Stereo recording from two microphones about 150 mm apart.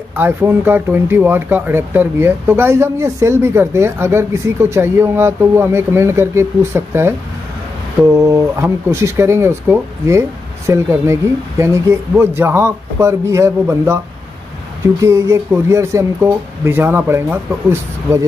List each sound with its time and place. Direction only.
0.1 s speech: 15° right (ahead or behind)
15.0 s speech: 20° right (ahead or behind)